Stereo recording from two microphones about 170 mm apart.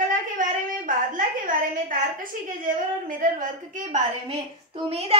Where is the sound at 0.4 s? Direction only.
50° right (ahead or behind).